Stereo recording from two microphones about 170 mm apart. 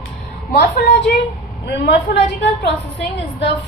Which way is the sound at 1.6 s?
75° left (ahead or behind).